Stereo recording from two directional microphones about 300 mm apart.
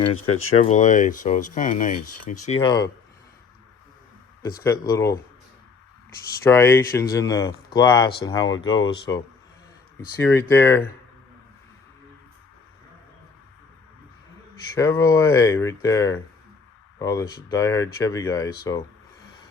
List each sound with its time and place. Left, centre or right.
0.3 s speech: left
0.5 s speech: left
4.4 s speech: centre
6.4 s speech: centre
14.8 s speech: centre